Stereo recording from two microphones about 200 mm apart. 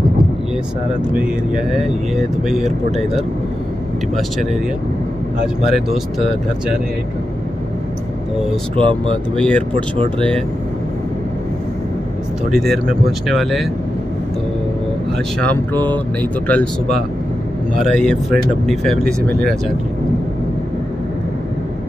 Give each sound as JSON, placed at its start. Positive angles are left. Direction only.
{"t": 1.1, "sound": "speech", "side_deg": -5}
{"t": 5.7, "sound": "speech", "side_deg": 0}
{"t": 8.7, "sound": "speech", "side_deg": -25}
{"t": 9.3, "sound": "speech", "side_deg": 5}
{"t": 9.9, "sound": "speech", "side_deg": -25}
{"t": 12.4, "sound": "speech", "side_deg": 0}
{"t": 16.2, "sound": "speech", "side_deg": 10}
{"t": 17.7, "sound": "speech", "side_deg": 5}